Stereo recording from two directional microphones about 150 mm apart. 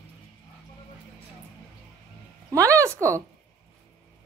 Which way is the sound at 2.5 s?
20° right (ahead or behind).